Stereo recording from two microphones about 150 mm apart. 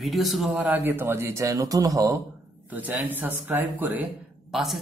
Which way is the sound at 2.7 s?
10° right (ahead or behind).